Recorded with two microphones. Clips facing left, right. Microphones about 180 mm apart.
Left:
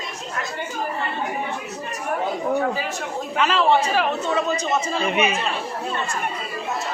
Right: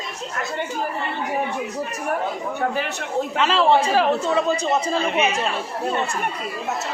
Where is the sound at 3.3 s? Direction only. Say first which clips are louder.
Even; 25° right (ahead or behind).